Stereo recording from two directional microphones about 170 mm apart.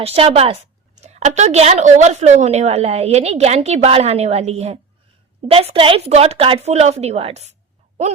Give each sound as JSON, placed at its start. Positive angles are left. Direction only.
{"t": 0.0, "sound": "a woman's voice", "side_deg": -35}